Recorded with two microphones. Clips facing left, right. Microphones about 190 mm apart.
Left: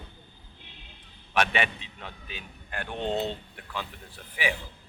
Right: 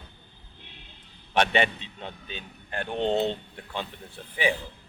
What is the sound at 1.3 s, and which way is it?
A man's voice, 30° right (ahead or behind).